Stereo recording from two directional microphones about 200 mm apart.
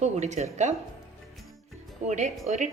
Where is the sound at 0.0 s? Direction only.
35° right (ahead or behind).